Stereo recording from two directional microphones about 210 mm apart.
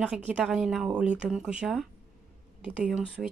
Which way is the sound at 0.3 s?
Centre (ahead or behind).